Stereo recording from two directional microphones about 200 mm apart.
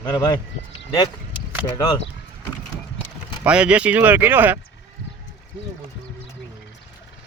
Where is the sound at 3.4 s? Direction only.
5° right (ahead or behind).